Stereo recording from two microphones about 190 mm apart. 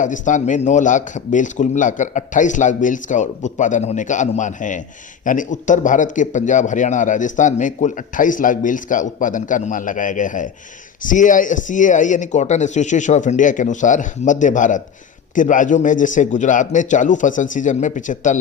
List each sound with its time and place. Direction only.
0.0 s a man's voice: 40° left (ahead or behind)